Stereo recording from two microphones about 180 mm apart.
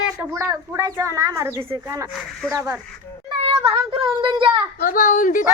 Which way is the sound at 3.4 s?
30° right (ahead or behind).